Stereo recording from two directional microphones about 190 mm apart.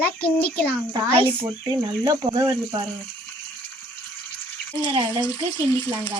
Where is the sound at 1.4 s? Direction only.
25° right (ahead or behind).